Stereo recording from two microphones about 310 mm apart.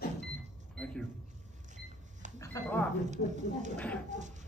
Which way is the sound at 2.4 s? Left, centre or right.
Centre.